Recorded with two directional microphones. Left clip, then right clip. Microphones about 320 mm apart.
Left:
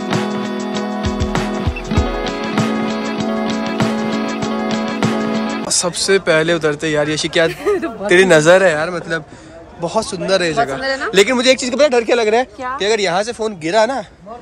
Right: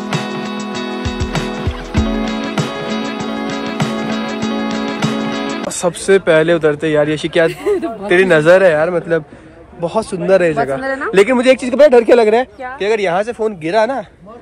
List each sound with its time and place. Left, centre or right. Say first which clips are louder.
0.1 s music: left 1 dB; centre
8.1 s a man's voice: even; centre
10.8 s a man's voice: even; right
11.1 s speech: right 2 dB; centre